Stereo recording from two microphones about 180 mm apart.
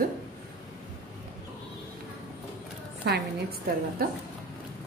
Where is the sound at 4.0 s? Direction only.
55° right (ahead or behind).